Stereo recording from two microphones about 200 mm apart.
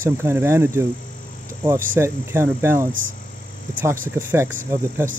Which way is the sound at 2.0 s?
10° right (ahead or behind).